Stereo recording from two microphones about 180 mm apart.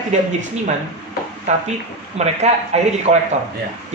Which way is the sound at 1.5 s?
40° right (ahead or behind).